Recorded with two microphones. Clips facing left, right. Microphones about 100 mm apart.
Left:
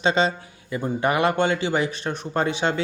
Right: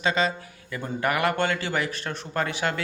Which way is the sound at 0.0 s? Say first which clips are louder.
Left 4 dB; 25° left (ahead or behind).